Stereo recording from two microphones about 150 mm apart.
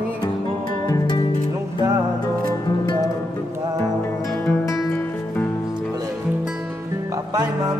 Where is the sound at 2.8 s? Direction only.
30° left (ahead or behind).